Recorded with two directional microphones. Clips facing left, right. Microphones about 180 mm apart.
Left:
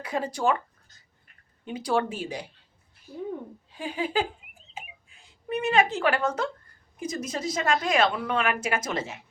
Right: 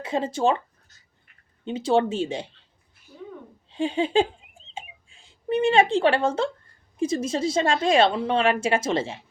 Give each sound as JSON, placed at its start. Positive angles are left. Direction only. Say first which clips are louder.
{"t": 0.0, "sound": "a woman's voice", "louder": "right 4 dB", "side_deg": -25}
{"t": 1.6, "sound": "a woman's voice", "louder": "right 5 dB", "side_deg": -25}
{"t": 3.7, "sound": "a sound", "louder": "right 7 dB", "side_deg": -25}
{"t": 6.9, "sound": "a woman's voice", "louder": "right 7 dB", "side_deg": -30}